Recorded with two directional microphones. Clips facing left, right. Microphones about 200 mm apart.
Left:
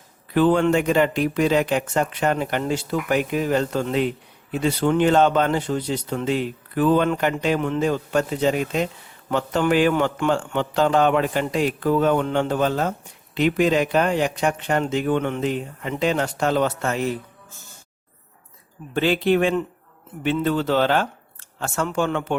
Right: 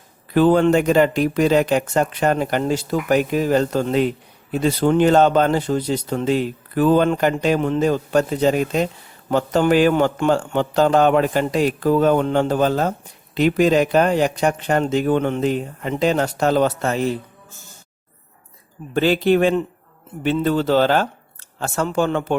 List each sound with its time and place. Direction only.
0.3 s speech: 40° right (ahead or behind)
18.9 s speech: 40° right (ahead or behind)